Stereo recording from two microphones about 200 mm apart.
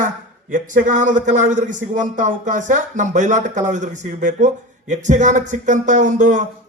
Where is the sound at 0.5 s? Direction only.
40° right (ahead or behind).